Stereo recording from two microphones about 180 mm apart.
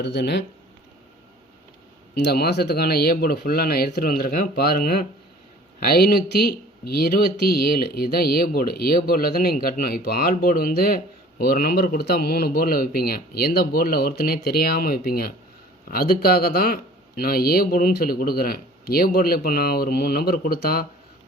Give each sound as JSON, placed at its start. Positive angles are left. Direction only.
{"t": 0.0, "sound": "speech", "side_deg": 65}
{"t": 2.1, "sound": "speech", "side_deg": 65}